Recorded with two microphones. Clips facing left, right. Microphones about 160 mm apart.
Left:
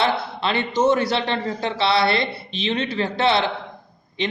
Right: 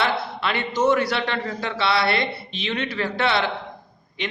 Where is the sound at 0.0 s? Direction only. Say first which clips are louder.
Left 2 dB; 25° left (ahead or behind).